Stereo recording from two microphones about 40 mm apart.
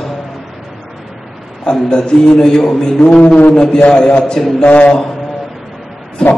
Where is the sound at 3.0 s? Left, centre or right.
Left.